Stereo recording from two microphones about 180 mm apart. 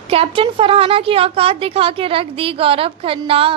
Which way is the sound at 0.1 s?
30° right (ahead or behind).